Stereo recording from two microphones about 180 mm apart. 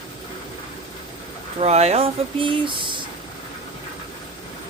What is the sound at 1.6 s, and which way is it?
Speech, 35° right (ahead or behind).